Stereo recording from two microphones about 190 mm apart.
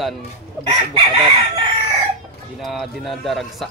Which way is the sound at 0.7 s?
25° right (ahead or behind).